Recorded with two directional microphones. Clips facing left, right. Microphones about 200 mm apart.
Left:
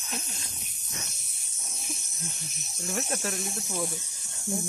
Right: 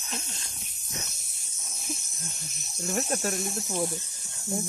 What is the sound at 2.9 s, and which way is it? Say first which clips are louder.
Speech: right 3 dB; 40° right (ahead or behind).